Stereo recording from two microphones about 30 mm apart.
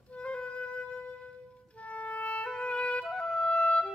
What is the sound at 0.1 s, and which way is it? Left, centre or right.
Music, left.